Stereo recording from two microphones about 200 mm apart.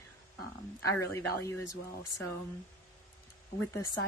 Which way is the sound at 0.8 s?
15° left (ahead or behind).